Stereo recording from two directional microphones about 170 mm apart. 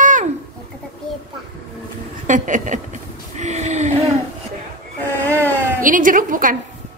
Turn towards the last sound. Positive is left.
turn(degrees=-50)  # may be behind; listen again after turning